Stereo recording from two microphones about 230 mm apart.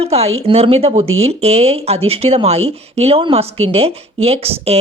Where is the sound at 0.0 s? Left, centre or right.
Right.